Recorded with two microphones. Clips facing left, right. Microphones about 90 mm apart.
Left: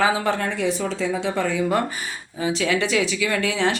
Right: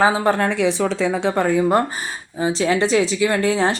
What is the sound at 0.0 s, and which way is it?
Speech, 35° right (ahead or behind).